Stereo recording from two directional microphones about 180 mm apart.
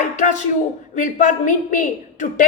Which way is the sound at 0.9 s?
45° left (ahead or behind).